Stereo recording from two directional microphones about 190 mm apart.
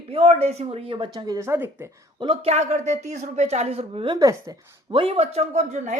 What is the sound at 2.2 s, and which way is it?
Speech, 30° right (ahead or behind).